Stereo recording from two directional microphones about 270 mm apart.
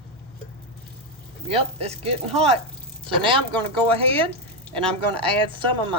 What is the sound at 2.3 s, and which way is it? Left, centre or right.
Speech, centre.